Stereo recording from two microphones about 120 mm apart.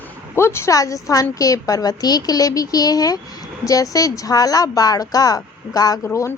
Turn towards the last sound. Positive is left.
turn(degrees=20)  # may be behind; listen again after turning